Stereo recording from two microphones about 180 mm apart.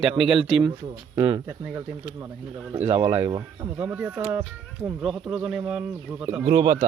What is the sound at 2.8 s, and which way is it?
Speech, 35° right (ahead or behind).